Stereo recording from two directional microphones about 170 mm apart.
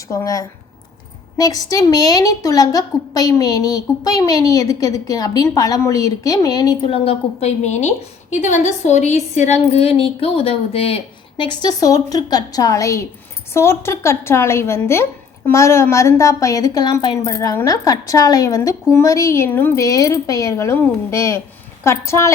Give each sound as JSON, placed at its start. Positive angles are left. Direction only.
{"t": 0.1, "sound": "a woman's voice", "side_deg": 20}